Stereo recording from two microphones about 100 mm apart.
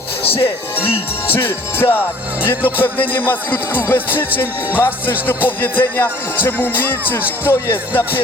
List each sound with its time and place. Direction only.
1.3 s music: 20° left (ahead or behind)